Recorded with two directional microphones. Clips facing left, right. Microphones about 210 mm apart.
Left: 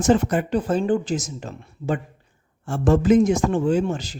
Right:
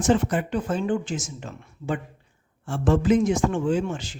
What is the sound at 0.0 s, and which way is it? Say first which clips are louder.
Speech: left 3 dB; 40° left (ahead or behind).